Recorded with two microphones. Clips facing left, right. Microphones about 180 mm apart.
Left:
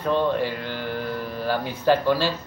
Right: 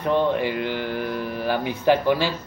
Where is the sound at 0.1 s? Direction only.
15° right (ahead or behind).